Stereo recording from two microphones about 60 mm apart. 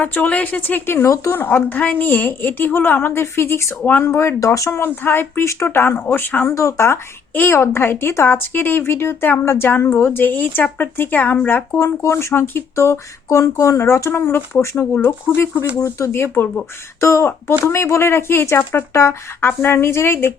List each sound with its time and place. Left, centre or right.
0.0 s speech: left
4.4 s speech: left
4.7 s speech: left
5.4 s speech: left
6.5 s speech: left
11.8 s speech: left
12.7 s speech: left
15.8 s speech: left
16.1 s speech: left
17.0 s speech: left